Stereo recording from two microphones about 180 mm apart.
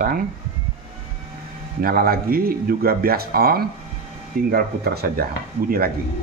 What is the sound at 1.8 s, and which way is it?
Speech, 55° right (ahead or behind).